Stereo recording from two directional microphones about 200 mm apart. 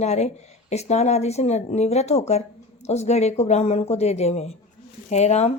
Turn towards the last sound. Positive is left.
turn(degrees=35)  # may be behind; listen again after turning